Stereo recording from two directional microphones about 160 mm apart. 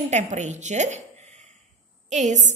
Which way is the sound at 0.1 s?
45° right (ahead or behind).